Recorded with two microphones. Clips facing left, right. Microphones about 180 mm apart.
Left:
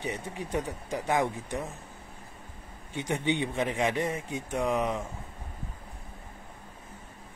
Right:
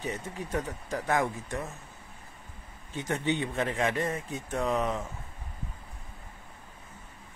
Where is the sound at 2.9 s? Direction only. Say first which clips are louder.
Left 1 dB; 15° left (ahead or behind).